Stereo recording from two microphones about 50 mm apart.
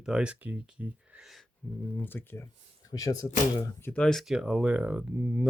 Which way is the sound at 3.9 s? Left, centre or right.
Left.